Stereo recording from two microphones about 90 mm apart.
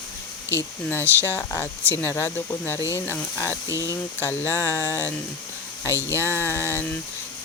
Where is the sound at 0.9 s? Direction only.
25° left (ahead or behind).